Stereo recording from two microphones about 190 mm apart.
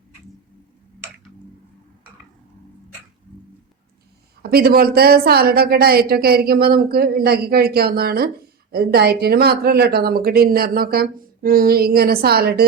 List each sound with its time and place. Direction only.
4.4 s speech: 55° right (ahead or behind)